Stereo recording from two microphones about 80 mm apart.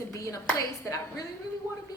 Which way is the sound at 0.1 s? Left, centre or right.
Left.